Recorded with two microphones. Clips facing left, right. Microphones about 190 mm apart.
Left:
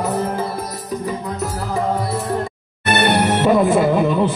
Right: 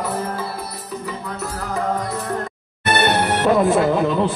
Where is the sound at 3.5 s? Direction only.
5° left (ahead or behind).